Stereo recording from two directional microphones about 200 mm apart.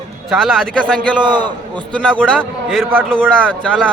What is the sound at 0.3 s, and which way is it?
Speech, centre (ahead or behind).